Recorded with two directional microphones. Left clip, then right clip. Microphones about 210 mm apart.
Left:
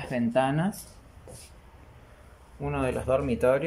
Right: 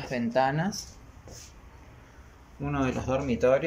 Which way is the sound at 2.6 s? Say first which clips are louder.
Left 1 dB; centre (ahead or behind).